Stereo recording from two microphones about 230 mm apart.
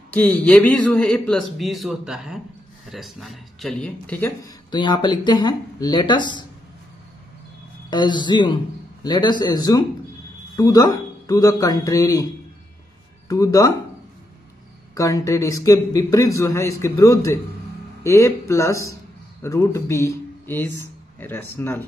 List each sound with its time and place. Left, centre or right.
0.1 s speech: centre
4.6 s speech: centre
7.9 s a man's voice: centre
13.3 s a man's voice: centre
15.0 s a man's voice: centre